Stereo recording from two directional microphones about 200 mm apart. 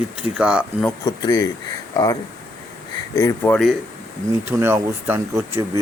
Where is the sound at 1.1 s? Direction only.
20° left (ahead or behind).